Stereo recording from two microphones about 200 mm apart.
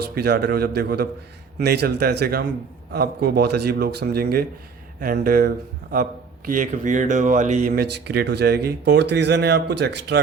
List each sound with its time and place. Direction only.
0.1 s a man's voice: 55° right (ahead or behind)
7.7 s speech: 50° right (ahead or behind)